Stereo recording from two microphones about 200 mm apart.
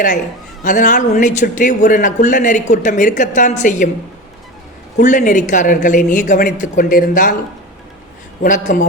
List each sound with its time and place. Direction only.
0.6 s a man's voice: 40° left (ahead or behind)
4.9 s a man's voice: 40° left (ahead or behind)
8.4 s a man's voice: 40° left (ahead or behind)